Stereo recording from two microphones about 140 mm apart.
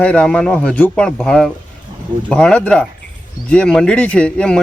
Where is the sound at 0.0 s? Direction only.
10° left (ahead or behind).